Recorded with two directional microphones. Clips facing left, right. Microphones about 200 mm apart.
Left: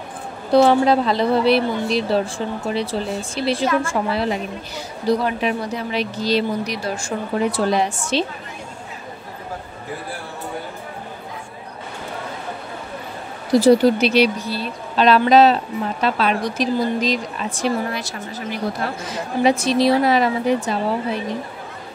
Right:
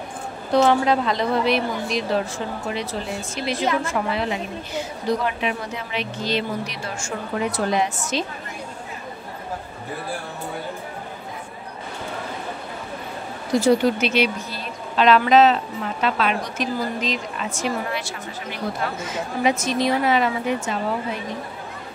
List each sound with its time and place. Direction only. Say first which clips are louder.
0.5 s a woman's voice: left 4 dB; 35° left (ahead or behind)
13.5 s a woman's voice: left 5 dB; 35° left (ahead or behind)